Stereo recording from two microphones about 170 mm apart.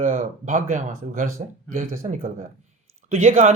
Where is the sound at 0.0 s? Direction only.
45° right (ahead or behind).